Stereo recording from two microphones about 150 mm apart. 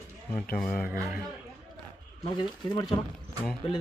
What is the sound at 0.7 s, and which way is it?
Speech, 75° left (ahead or behind).